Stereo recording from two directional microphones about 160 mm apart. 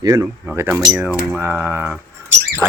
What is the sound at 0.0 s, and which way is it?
Speech, 20° right (ahead or behind).